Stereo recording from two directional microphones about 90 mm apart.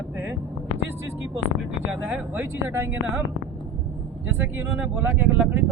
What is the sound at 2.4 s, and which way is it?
Speech, 25° right (ahead or behind).